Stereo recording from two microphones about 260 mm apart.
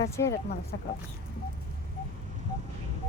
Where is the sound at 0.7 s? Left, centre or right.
Left.